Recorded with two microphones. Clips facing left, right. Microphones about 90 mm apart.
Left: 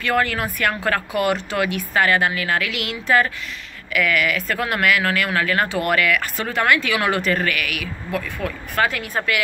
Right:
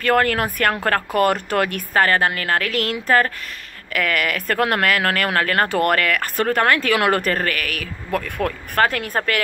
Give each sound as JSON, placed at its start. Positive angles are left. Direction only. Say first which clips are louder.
{"t": 0.0, "sound": "speech", "louder": "right 3 dB", "side_deg": -50}
{"t": 8.4, "sound": "speech", "louder": "right 3 dB", "side_deg": -55}